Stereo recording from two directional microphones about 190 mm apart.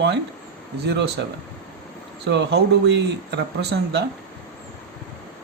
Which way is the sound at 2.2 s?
65° right (ahead or behind).